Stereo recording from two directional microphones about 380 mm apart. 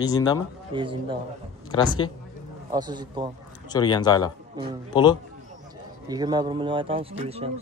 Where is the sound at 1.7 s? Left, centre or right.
Centre.